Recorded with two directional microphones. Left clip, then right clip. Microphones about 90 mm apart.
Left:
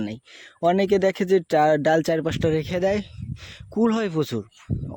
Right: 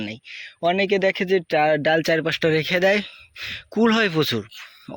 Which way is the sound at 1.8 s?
50° left (ahead or behind).